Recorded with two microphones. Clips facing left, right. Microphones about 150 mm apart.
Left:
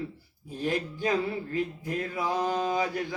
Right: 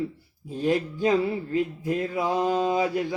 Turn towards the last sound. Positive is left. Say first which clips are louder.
# right 4 dB
turn(degrees=-25)  # may be behind; listen again after turning